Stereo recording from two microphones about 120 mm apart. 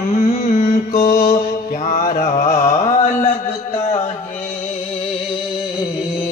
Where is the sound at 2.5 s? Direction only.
90° left.